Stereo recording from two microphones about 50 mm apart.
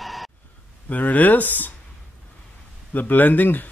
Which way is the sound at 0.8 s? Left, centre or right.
Left.